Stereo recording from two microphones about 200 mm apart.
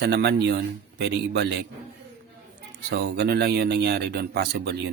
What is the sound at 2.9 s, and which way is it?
Speech, 55° right (ahead or behind).